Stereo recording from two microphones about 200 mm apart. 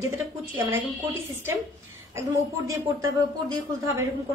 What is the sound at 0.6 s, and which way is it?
Speech, 75° right (ahead or behind).